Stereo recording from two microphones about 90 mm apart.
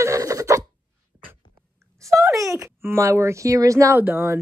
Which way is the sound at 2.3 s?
35° right (ahead or behind).